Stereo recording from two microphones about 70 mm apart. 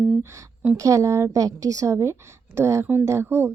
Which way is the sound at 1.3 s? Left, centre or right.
Right.